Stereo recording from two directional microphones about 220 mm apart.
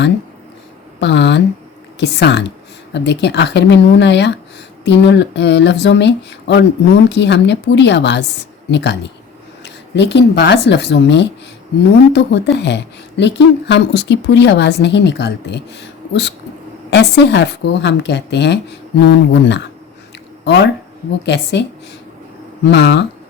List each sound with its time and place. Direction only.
0.9 s speech: 50° left (ahead or behind)
22.7 s speech: 50° left (ahead or behind)